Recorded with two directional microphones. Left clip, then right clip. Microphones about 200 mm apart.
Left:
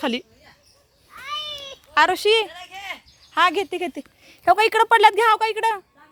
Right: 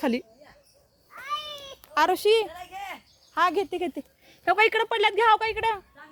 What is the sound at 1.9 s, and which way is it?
Speech, 5° left (ahead or behind).